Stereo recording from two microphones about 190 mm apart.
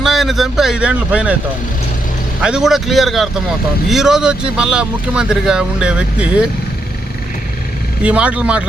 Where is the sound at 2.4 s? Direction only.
5° right (ahead or behind).